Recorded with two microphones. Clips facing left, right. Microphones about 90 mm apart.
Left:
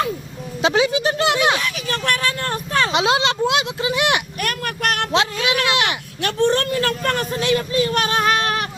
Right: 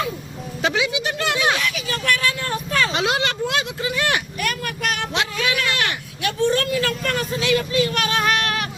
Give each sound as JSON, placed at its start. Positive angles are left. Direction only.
{"t": 0.7, "sound": "speech", "side_deg": 40}
{"t": 1.9, "sound": "a sound", "side_deg": 45}
{"t": 2.9, "sound": "speech", "side_deg": 20}
{"t": 4.4, "sound": "vehicle", "side_deg": 50}
{"t": 5.1, "sound": "a sound", "side_deg": 25}
{"t": 6.4, "sound": "vehicle", "side_deg": 55}